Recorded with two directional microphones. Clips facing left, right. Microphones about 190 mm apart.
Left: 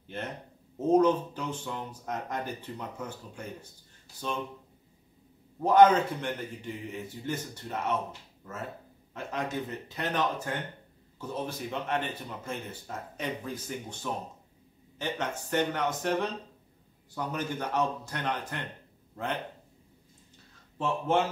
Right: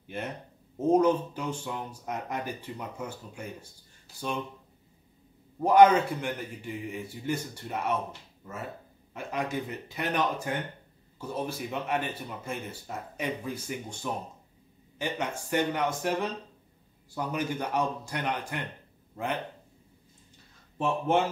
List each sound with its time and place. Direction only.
0.0 s speech: 10° right (ahead or behind)
5.6 s speech: 10° right (ahead or behind)
9.1 s speech: 10° right (ahead or behind)
20.7 s speech: 15° right (ahead or behind)